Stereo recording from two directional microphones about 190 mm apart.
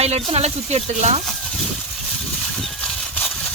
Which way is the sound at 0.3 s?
35° right (ahead or behind).